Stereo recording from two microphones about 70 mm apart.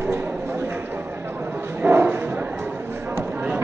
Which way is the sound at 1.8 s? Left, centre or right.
Right.